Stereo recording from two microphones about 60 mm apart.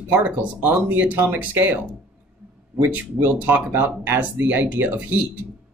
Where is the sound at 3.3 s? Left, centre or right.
Right.